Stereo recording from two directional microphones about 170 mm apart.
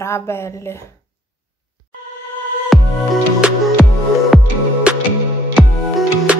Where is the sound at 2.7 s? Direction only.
Centre (ahead or behind).